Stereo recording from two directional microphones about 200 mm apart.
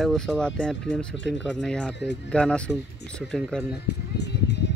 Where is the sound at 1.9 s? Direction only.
60° left (ahead or behind).